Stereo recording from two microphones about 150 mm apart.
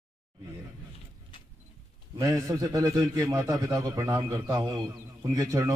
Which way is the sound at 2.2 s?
20° right (ahead or behind).